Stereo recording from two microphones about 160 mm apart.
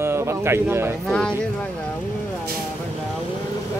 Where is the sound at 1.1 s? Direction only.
5° left (ahead or behind).